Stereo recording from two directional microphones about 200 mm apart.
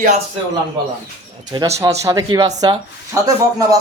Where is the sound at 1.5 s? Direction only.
15° right (ahead or behind).